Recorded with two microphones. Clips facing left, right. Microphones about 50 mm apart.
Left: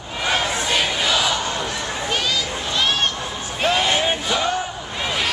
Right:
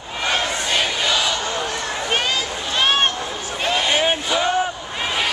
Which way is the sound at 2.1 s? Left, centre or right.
Right.